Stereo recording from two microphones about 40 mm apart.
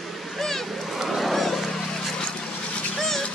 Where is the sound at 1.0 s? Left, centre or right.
Centre.